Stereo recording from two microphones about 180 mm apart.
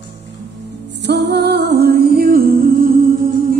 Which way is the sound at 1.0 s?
70° right (ahead or behind).